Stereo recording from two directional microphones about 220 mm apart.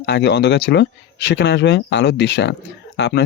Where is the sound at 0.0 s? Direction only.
50° left (ahead or behind).